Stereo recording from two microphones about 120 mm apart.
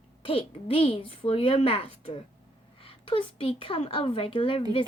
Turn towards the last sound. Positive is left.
turn(degrees=50)  # may be behind; listen again after turning